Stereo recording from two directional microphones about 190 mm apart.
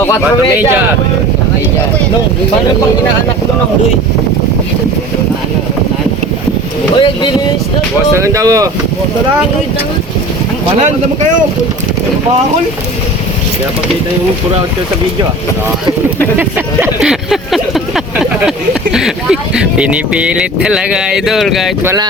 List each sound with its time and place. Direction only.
6.9 s speech: 25° left (ahead or behind)
8.1 s speech: 15° right (ahead or behind)
16.4 s speech: 10° right (ahead or behind)